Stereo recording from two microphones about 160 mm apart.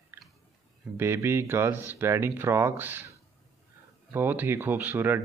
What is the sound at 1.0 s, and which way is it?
Speech, 15° right (ahead or behind).